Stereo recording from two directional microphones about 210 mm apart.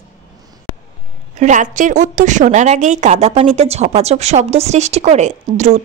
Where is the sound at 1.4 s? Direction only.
35° right (ahead or behind).